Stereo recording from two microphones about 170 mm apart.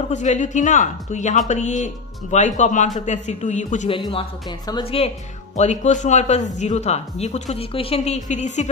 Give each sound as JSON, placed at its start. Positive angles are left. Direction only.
{"t": 0.1, "sound": "speech", "side_deg": 45}
{"t": 3.9, "sound": "speech", "side_deg": 30}
{"t": 5.6, "sound": "speech", "side_deg": 45}